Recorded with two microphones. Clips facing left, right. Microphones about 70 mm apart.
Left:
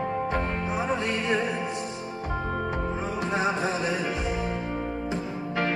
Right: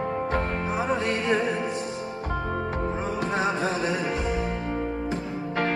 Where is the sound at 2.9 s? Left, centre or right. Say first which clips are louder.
Right 1 dB; centre.